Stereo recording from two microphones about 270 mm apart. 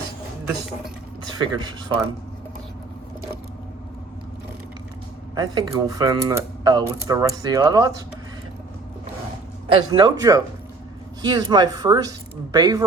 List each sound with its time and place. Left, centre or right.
1.5 s speech: centre
5.3 s speech: centre
9.6 s speech: centre